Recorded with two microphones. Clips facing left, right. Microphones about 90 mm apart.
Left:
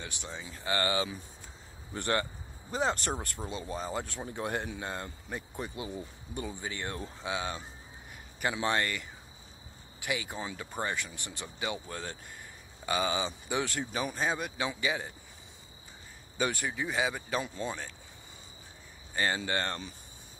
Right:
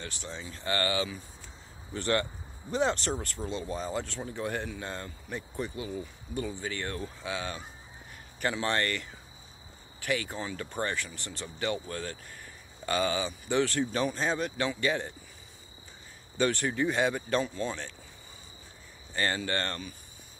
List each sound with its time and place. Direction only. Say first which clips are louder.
0.0 s speech: right 1 dB; 15° left (ahead or behind)
2.7 s speech: right 3 dB; 5° left (ahead or behind)
3.4 s speech: right 3 dB; 20° left (ahead or behind)
3.7 s speech: even; centre (ahead or behind)
4.0 s speech: right 1 dB; 15° left (ahead or behind)
16.3 s speech: right 4 dB; 10° left (ahead or behind)
19.1 s speech: even; 15° left (ahead or behind)